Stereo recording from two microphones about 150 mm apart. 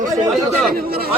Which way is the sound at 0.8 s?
90° right.